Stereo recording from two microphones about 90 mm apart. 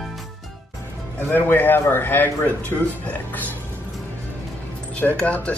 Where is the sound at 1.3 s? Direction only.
20° left (ahead or behind).